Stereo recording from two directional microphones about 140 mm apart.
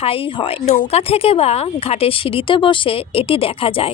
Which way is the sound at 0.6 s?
65° left (ahead or behind).